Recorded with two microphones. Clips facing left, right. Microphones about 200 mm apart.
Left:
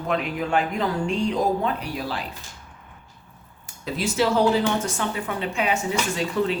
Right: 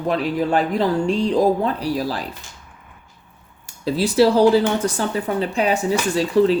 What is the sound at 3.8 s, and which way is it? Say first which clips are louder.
Speech: right 7 dB; 35° right (ahead or behind).